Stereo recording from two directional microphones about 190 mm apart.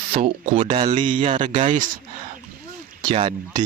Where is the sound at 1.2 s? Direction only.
40° right (ahead or behind).